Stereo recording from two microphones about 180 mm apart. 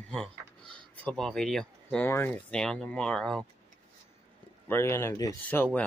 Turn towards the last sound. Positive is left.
turn(degrees=10)  # may be behind; listen again after turning